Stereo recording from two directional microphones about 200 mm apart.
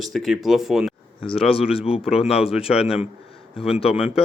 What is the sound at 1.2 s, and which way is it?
Speech, 30° left (ahead or behind).